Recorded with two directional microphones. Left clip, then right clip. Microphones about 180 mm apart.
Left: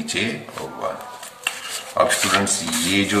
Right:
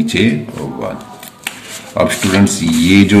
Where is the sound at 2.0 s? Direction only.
30° right (ahead or behind).